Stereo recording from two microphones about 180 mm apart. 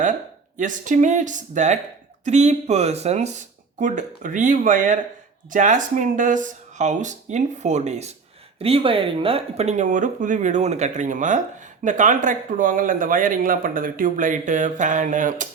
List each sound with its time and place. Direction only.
0.0 s speech: 45° right (ahead or behind)